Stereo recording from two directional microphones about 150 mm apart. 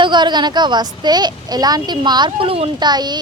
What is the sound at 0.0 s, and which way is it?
A woman's voice, 30° right (ahead or behind).